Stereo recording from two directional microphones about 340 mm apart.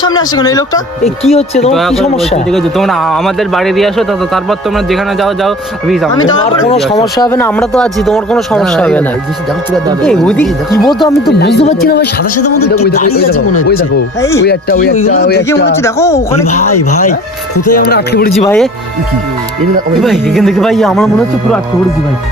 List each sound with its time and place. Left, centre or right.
0.2 s speech: centre
1.7 s speech: centre
6.7 s speech: centre
7.2 s speech: centre
10.0 s speech: centre
11.3 s speech: left
15.8 s speech: centre
17.7 s speech: left
18.3 s speech: centre
20.0 s speech: centre